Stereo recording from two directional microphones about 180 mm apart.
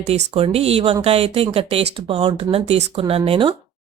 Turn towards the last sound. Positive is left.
turn(degrees=-30)  # may be behind; listen again after turning